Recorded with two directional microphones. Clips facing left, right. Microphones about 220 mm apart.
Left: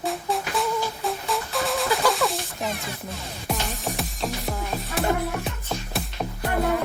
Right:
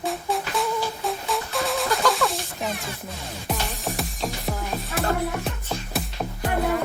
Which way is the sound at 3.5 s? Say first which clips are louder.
Even; centre (ahead or behind).